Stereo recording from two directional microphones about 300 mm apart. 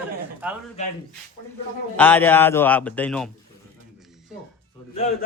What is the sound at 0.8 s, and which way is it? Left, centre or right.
Speech, left.